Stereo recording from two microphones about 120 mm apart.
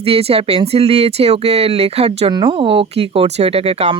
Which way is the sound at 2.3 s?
40° right (ahead or behind).